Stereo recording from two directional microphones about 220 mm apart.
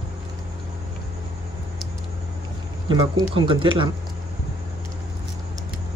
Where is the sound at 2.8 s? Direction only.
20° right (ahead or behind).